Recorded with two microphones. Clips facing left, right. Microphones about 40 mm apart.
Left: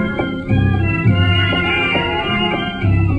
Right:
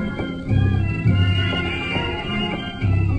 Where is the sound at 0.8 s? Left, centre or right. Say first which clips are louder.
Left 6 dB; left.